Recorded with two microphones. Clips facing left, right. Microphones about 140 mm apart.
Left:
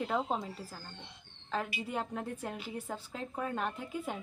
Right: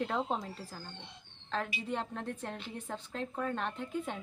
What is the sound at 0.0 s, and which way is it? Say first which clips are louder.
A woman's voice: left 1 dB; 5° left (ahead or behind).